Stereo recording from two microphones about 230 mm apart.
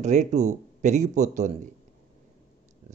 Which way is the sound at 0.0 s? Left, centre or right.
Right.